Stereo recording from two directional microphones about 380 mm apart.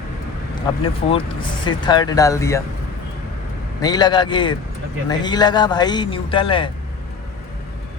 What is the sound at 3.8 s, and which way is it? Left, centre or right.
Speech, centre.